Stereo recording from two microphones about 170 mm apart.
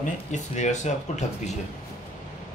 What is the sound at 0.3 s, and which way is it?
A man's voice, 45° left (ahead or behind).